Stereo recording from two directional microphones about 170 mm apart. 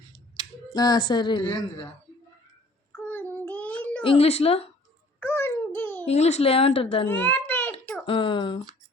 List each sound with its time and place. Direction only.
0.7 s a woman's voice: 25° left (ahead or behind)
3.1 s child singing: 10° left (ahead or behind)
4.0 s a woman's voice: 35° left (ahead or behind)
5.2 s a sound: 15° left (ahead or behind)
6.1 s a woman's voice: 40° left (ahead or behind)
7.1 s a sound: 10° left (ahead or behind)
8.0 s a woman's voice: 30° left (ahead or behind)